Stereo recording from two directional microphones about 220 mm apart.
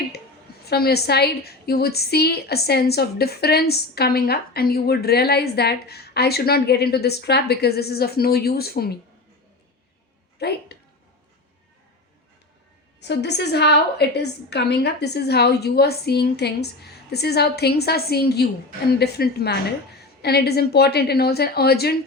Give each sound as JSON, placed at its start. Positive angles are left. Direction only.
{"t": 0.6, "sound": "a woman's voice", "side_deg": 45}
{"t": 10.3, "sound": "a woman's voice", "side_deg": 50}
{"t": 13.0, "sound": "a woman's voice", "side_deg": 50}